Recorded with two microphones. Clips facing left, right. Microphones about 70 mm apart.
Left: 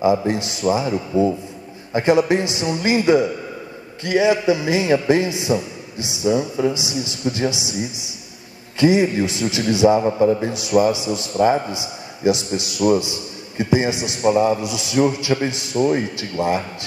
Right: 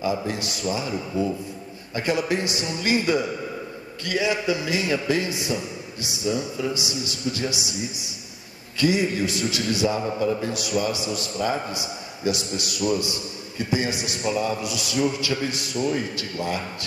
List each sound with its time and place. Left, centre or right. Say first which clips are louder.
0.0 s a man's voice: left 8 dB; left
6.2 s a man's voice: left 7 dB; left
6.7 s a man's voice: left 4 dB; left
10.0 s a man's voice: left 8 dB; left
10.4 s a man's voice: left 8 dB; left